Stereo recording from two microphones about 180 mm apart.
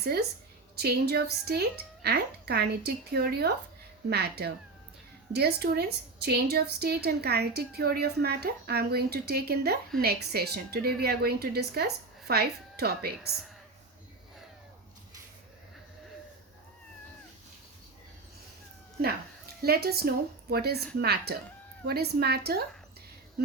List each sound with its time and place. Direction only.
0.0 s a woman's voice: 60° right (ahead or behind)
19.6 s a woman's voice: 60° right (ahead or behind)